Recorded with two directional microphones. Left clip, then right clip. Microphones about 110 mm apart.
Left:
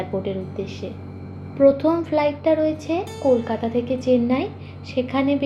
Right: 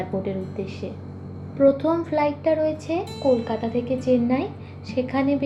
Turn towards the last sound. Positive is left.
turn(degrees=30)  # may be behind; listen again after turning